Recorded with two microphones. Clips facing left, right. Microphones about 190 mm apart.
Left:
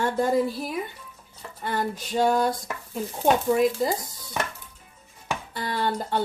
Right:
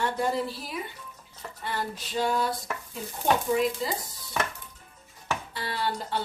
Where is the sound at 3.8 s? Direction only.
45° left (ahead or behind).